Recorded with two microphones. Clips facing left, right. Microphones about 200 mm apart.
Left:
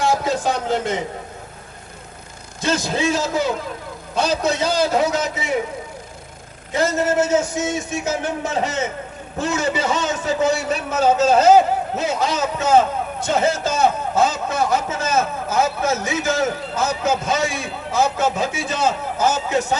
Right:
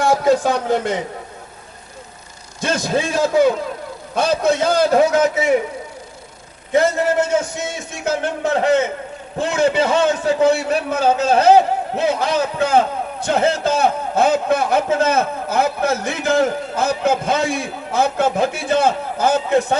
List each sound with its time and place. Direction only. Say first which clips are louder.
0.0 s speech: right 5 dB; 55° right (ahead or behind)
2.6 s a man's voice: right 1 dB; 55° right (ahead or behind)
7.9 s a man's voice: right 1 dB; 55° right (ahead or behind)